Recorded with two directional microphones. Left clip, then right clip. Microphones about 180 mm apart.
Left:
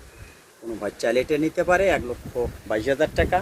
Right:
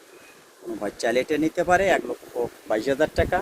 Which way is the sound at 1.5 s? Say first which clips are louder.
Even; 90° right.